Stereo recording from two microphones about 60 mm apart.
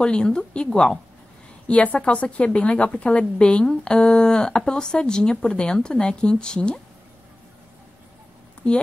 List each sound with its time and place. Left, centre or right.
0.0 s a woman's voice: centre
1.7 s a woman's voice: left